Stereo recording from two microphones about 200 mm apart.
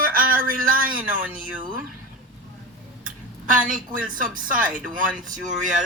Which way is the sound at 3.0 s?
40° right (ahead or behind).